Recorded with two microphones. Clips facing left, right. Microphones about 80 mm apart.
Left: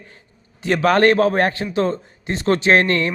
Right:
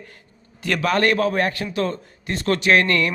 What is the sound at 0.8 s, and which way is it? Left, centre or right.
Speech, left.